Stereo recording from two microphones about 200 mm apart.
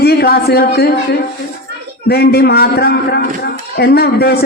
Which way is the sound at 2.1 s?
50° left (ahead or behind).